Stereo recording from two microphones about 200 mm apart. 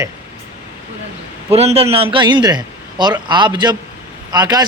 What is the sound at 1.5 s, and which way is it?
A man's voice, 30° right (ahead or behind).